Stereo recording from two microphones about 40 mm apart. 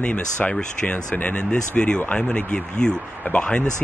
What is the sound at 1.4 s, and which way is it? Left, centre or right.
Speech, left.